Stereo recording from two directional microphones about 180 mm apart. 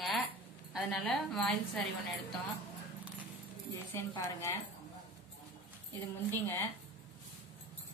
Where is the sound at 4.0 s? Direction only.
15° left (ahead or behind).